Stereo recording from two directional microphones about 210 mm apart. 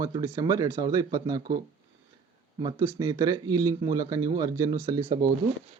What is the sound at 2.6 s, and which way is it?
Speech, 20° right (ahead or behind).